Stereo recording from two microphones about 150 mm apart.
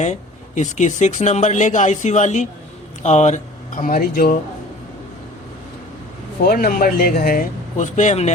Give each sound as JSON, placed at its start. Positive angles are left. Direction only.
{"t": 0.0, "sound": "speech", "side_deg": 50}
{"t": 6.5, "sound": "speech", "side_deg": 80}